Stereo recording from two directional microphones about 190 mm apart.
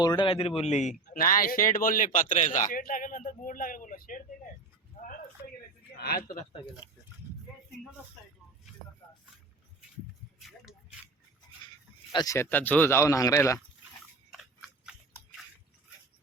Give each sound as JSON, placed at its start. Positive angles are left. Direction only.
{"t": 0.0, "sound": "a man's voice", "side_deg": 25}
{"t": 4.9, "sound": "a sound", "side_deg": 45}
{"t": 6.0, "sound": "a man's voice", "side_deg": 55}
{"t": 12.1, "sound": "speech", "side_deg": 15}
{"t": 14.3, "sound": "biting", "side_deg": 0}